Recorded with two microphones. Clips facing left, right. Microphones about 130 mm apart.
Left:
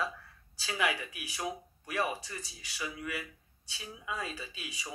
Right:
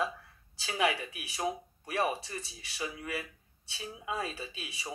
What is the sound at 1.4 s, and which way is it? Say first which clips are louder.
Speech: right 4 dB; 35° right (ahead or behind).